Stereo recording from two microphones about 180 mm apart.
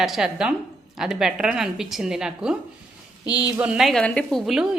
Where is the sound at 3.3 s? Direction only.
20° left (ahead or behind).